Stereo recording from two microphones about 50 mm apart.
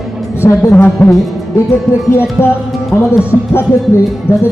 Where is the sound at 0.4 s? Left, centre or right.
Left.